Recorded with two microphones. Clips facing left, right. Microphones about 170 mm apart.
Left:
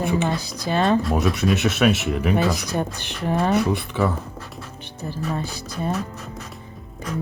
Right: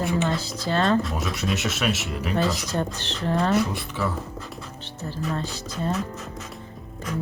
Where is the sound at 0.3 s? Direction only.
15° left (ahead or behind).